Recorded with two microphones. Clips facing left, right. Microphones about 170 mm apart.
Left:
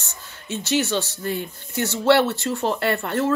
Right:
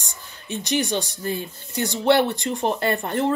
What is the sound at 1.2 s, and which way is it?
Speech, 60° left (ahead or behind).